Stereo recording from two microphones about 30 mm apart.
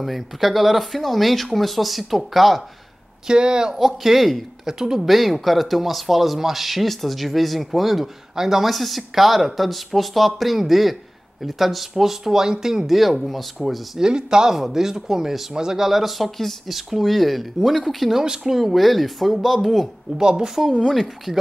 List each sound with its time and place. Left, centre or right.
0.0 s speech: centre
3.3 s speech: right
3.7 s speech: centre
4.6 s speech: centre
5.0 s speech: centre
8.4 s speech: centre
8.6 s speech: centre
12.8 s speech: centre
13.9 s speech: right
14.5 s speech: centre
15.9 s speech: centre
18.2 s speech: centre
18.6 s speech: centre
20.2 s speech: right